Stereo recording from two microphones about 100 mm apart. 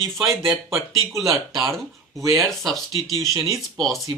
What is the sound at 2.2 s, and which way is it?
Speech, 35° right (ahead or behind).